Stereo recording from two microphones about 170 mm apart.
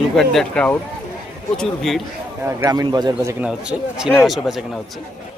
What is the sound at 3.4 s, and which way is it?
Speech, 5° right (ahead or behind).